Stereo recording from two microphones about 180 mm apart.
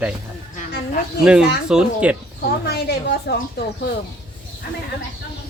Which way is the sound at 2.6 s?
60° left (ahead or behind).